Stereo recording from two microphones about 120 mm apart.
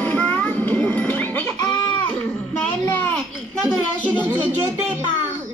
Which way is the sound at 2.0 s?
15° left (ahead or behind).